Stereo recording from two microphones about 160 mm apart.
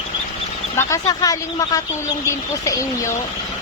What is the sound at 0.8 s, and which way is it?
Speech, 20° left (ahead or behind).